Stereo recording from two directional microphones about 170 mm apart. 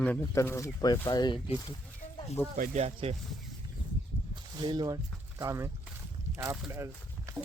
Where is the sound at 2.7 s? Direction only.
40° right (ahead or behind).